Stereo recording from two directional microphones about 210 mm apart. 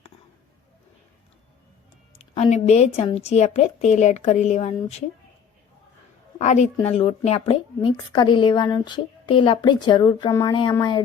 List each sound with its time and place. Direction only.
2.1 s a woman's voice: 30° left (ahead or behind)
6.4 s a woman's voice: 35° left (ahead or behind)